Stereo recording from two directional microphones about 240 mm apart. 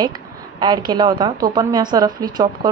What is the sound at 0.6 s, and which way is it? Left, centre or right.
Speech, centre.